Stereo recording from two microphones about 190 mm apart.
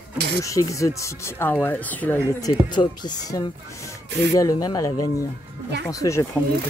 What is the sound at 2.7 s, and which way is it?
Speech, 25° left (ahead or behind).